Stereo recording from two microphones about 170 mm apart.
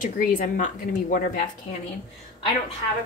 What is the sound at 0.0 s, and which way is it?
Speech, 50° left (ahead or behind).